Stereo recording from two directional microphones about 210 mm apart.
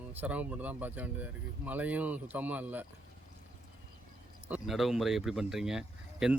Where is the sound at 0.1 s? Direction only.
10° right (ahead or behind).